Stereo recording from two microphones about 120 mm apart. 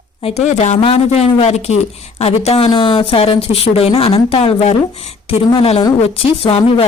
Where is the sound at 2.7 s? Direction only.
40° left (ahead or behind).